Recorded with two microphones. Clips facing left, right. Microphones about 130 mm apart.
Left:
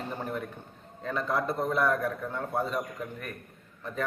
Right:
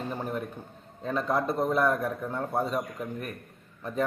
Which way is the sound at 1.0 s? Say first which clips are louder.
Right 2 dB; 15° right (ahead or behind).